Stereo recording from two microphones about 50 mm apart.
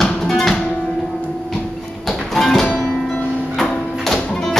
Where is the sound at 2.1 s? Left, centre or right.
Centre.